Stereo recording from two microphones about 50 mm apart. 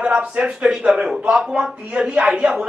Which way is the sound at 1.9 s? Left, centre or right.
Right.